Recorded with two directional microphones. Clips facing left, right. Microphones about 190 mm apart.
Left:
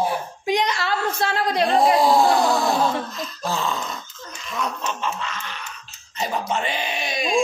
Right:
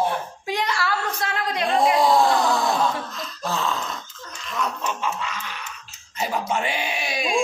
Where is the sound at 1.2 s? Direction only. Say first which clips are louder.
Left 4 dB; 30° left (ahead or behind).